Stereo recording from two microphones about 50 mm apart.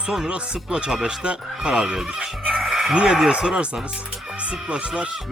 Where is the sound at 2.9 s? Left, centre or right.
Centre.